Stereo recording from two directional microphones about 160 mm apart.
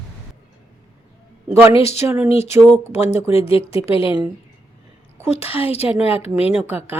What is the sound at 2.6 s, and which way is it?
Speech, 15° right (ahead or behind).